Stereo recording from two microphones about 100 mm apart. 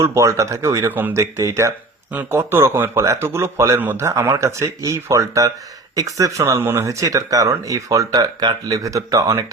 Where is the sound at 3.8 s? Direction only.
20° right (ahead or behind).